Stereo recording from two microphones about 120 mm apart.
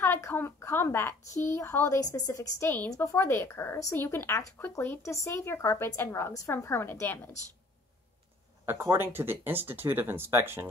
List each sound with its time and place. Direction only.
0.0 s speech: 20° left (ahead or behind)
8.6 s speech: 20° right (ahead or behind)